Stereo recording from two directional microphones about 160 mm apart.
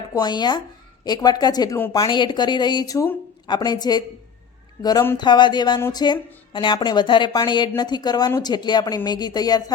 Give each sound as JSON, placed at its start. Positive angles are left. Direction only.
{"t": 0.1, "sound": "speech", "side_deg": 25}